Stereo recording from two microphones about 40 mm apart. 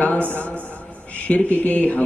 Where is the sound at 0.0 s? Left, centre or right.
Left.